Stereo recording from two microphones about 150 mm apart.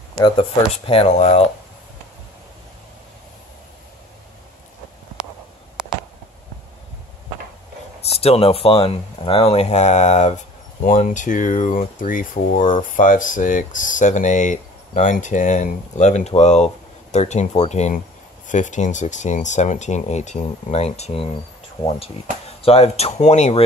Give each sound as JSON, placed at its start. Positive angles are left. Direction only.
{"t": 0.8, "sound": "speech", "side_deg": 40}
{"t": 8.0, "sound": "speech", "side_deg": 45}
{"t": 22.6, "sound": "speech", "side_deg": 40}